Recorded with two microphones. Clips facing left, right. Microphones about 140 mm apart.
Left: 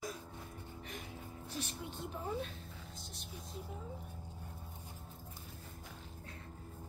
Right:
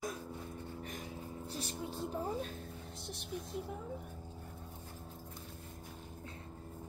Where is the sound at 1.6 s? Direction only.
35° right (ahead or behind).